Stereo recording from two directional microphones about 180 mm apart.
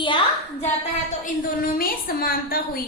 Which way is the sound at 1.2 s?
50° left (ahead or behind).